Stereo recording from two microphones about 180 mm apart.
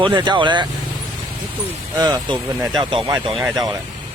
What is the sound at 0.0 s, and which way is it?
Speech, 25° right (ahead or behind).